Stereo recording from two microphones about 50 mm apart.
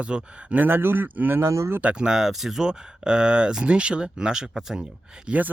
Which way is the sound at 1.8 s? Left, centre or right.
Right.